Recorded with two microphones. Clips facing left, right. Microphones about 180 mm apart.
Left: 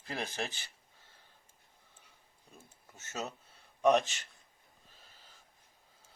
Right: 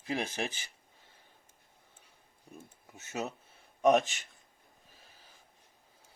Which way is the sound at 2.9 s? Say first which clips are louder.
Right 3 dB; 15° right (ahead or behind).